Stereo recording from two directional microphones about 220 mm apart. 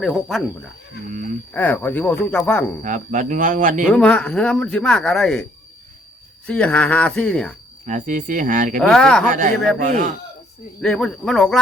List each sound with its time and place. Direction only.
0.0 s speech: centre (ahead or behind)
1.1 s speech: 35° right (ahead or behind)
1.5 s speech: 10° left (ahead or behind)
2.8 s speech: 35° right (ahead or behind)
3.8 s speech: 5° left (ahead or behind)
7.9 s speech: 35° right (ahead or behind)
8.8 s speech: 5° left (ahead or behind)
9.2 s speech: 35° right (ahead or behind)
10.8 s speech: 5° left (ahead or behind)